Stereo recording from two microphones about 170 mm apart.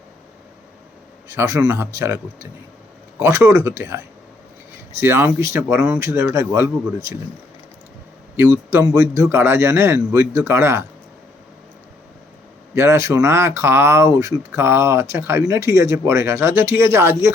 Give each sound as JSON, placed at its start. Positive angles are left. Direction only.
{"t": 1.3, "sound": "speech", "side_deg": -15}
{"t": 8.4, "sound": "a man's voice", "side_deg": -20}
{"t": 12.7, "sound": "speech", "side_deg": -15}